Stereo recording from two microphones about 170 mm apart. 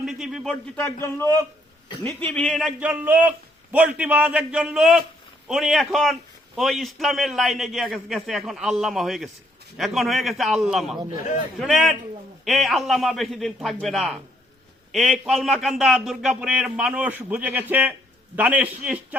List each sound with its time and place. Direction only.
0.0 s a man's voice: centre (ahead or behind)
0.8 s a man's voice: 15° left (ahead or behind); by 19.0 s 10° right (ahead or behind)